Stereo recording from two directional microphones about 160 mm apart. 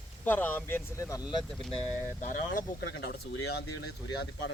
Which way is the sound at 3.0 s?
90° left.